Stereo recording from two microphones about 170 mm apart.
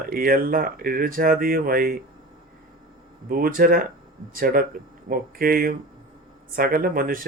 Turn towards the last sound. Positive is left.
turn(degrees=-60)  # may be behind; listen again after turning